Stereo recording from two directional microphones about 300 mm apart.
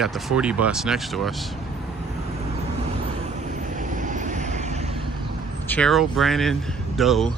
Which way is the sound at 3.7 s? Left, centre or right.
Right.